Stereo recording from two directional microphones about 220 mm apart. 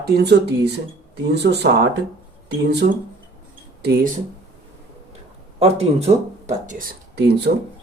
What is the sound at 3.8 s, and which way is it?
Speech, 40° right (ahead or behind).